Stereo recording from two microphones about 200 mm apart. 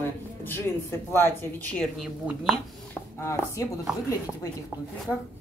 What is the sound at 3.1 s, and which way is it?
Speech, 15° left (ahead or behind).